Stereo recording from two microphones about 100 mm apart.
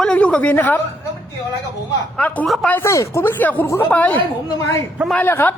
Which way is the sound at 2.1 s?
15° left (ahead or behind).